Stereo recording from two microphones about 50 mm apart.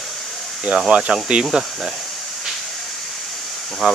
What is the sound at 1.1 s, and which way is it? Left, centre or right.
Speech, centre.